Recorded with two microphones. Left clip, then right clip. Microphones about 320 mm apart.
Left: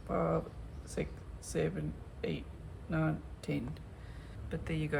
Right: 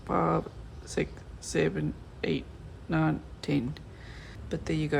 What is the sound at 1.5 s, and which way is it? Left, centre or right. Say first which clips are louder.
Speech: right 7 dB; centre.